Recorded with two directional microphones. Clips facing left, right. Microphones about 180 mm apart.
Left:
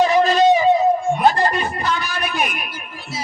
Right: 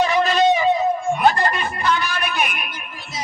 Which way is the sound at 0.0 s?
40° left (ahead or behind).